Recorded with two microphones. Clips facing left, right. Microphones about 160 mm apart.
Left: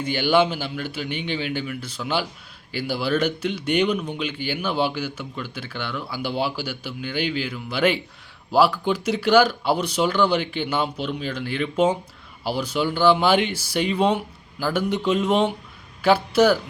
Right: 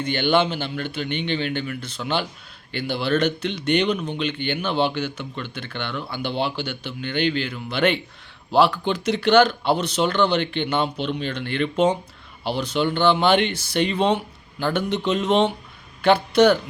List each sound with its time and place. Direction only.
0.0 s a man's voice: 10° left (ahead or behind)